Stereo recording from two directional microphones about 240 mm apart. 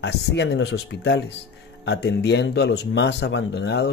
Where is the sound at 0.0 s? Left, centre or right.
Left.